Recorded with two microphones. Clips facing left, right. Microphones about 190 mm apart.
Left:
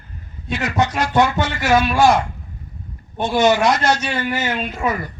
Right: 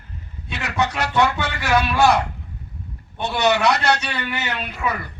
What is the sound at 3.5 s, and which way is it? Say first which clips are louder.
Speech: left 2 dB; 65° right (ahead or behind).